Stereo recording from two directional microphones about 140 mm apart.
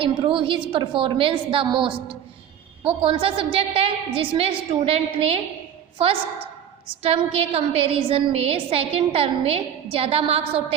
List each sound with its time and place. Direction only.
0.0 s a woman's voice: 35° right (ahead or behind)